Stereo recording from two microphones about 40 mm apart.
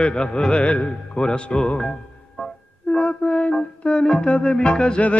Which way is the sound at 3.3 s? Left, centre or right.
Left.